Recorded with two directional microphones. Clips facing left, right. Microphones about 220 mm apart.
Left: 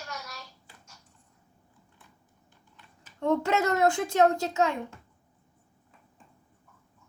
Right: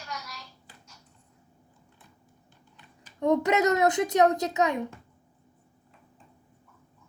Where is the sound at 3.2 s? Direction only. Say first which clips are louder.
Right 3 dB; 15° right (ahead or behind).